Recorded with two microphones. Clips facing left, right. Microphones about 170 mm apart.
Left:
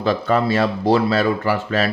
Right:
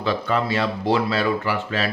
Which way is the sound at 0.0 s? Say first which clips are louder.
Left 4 dB; 40° left (ahead or behind).